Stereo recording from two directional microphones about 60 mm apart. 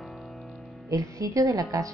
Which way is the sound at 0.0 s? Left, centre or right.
Centre.